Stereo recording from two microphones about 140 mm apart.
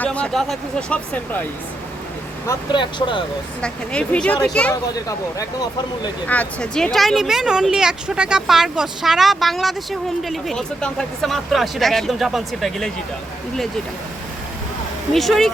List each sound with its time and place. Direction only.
0.0 s speech: 10° left (ahead or behind)
2.7 s speech: 35° left (ahead or behind)
3.6 s speech: 5° left (ahead or behind)
4.7 s speech: 25° left (ahead or behind)
6.2 s speech: 10° left (ahead or behind)
15.1 s speech: centre (ahead or behind)